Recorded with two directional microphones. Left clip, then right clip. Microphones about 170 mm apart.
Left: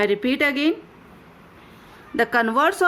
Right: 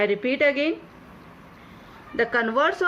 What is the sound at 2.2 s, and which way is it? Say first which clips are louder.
Speech: left 3 dB; 45° left (ahead or behind).